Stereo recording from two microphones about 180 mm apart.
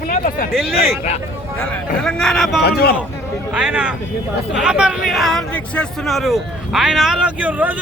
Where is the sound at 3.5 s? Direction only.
5° right (ahead or behind).